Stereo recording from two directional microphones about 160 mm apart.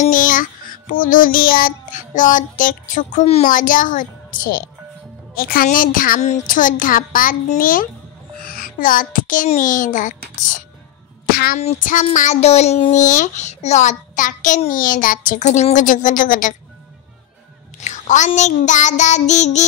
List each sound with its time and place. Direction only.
0.0 s child singing: 55° left (ahead or behind)
3.4 s a woman's voice: 55° left (ahead or behind)
11.2 s a sound: 70° left (ahead or behind)
11.6 s speech: 50° left (ahead or behind)
17.7 s a sound: 50° left (ahead or behind)
18.6 s speech: 50° left (ahead or behind)